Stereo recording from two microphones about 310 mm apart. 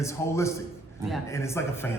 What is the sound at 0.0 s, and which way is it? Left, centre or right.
A man's voice, centre.